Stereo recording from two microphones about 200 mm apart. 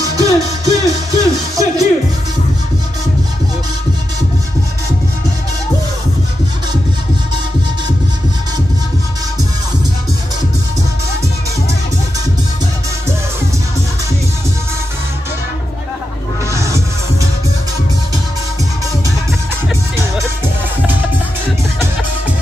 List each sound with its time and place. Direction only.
0.0 s music: 15° right (ahead or behind)
16.4 s music: 15° right (ahead or behind)